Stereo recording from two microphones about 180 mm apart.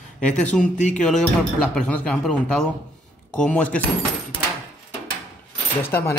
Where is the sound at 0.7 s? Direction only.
45° left (ahead or behind).